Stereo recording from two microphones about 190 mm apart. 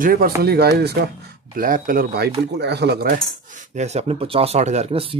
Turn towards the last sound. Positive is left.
turn(degrees=-30)  # may be behind; listen again after turning